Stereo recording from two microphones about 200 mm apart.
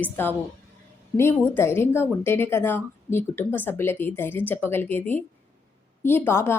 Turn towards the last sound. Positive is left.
turn(degrees=10)  # may be behind; listen again after turning